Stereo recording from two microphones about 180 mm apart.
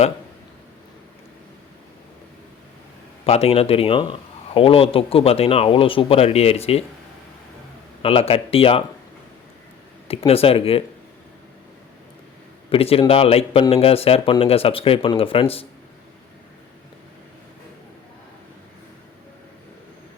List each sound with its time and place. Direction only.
3.2 s speech: 35° left (ahead or behind)
8.0 s speech: 30° left (ahead or behind)
10.1 s speech: 30° left (ahead or behind)
12.7 s speech: 30° left (ahead or behind)